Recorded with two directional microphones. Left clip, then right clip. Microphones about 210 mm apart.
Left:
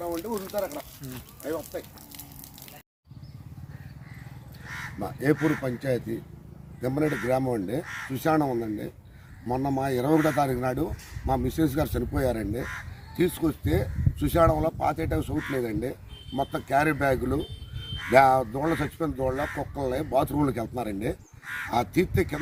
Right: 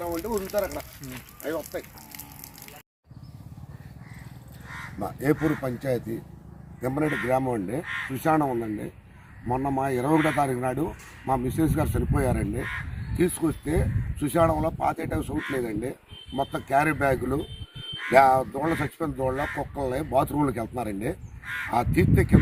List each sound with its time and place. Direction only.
0.0 s speech: 40° right (ahead or behind)
4.9 s a man's voice: 5° right (ahead or behind)
21.4 s speech: 40° left (ahead or behind)
21.7 s a man's voice: centre (ahead or behind)